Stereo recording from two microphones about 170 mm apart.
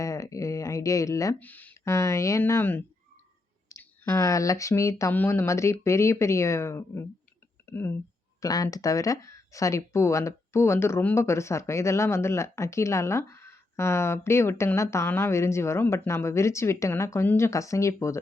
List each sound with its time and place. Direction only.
0.0 s speech: 20° left (ahead or behind)